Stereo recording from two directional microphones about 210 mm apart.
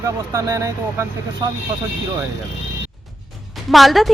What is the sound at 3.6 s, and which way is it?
Speech, centre (ahead or behind).